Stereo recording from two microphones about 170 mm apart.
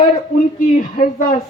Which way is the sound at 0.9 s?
55° left (ahead or behind).